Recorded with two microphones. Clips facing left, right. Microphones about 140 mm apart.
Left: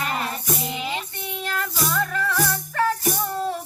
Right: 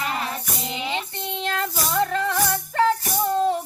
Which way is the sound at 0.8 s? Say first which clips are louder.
Right 1 dB; 25° right (ahead or behind).